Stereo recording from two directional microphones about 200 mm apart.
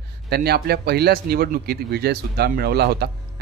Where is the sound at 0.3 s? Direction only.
50° right (ahead or behind).